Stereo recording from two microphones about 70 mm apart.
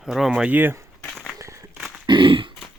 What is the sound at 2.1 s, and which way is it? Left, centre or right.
Throat clearing, right.